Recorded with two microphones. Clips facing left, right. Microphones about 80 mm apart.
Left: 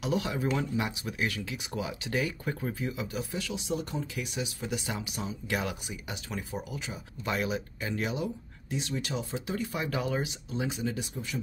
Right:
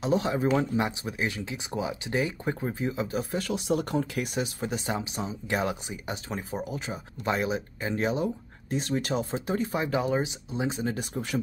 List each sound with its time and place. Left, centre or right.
0.0 s speech: right
10.8 s speech: right